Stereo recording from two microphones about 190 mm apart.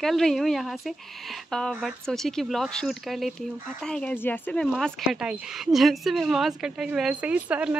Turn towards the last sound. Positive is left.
turn(degrees=-10)  # may be behind; listen again after turning